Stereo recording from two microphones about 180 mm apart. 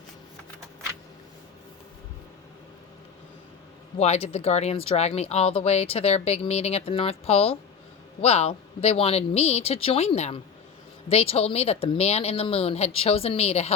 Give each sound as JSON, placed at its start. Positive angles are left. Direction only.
{"t": 3.9, "sound": "speech", "side_deg": 35}